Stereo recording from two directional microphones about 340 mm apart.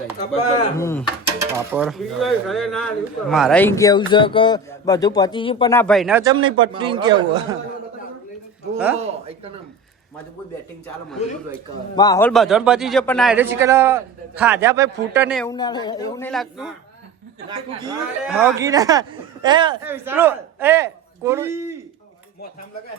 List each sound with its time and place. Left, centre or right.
0.4 s speech: centre
1.4 s a man's voice: centre
9.0 s speech: centre
11.9 s a man's voice: centre
15.4 s speech: centre
17.7 s speech: centre